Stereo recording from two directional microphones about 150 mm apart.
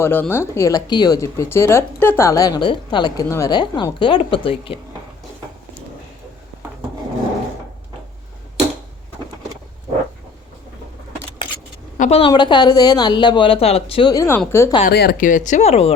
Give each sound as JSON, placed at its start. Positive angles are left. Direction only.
{"t": 0.0, "sound": "speech", "side_deg": 15}
{"t": 11.9, "sound": "a woman's voice", "side_deg": 55}
{"t": 12.2, "sound": "speech", "side_deg": 30}
{"t": 14.1, "sound": "speech", "side_deg": 20}
{"t": 14.8, "sound": "speech", "side_deg": 80}